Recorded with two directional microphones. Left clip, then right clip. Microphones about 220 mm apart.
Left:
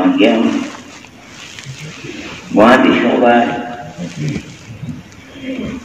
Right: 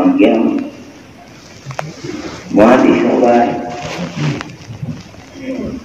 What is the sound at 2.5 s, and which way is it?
Speech, 25° left (ahead or behind).